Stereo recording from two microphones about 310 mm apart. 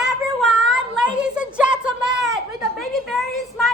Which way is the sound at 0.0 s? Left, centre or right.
Centre.